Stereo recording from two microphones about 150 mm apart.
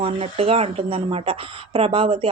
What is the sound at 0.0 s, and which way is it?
Speech, 40° right (ahead or behind).